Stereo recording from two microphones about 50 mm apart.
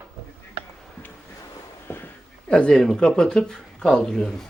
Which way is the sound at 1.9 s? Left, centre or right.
Left.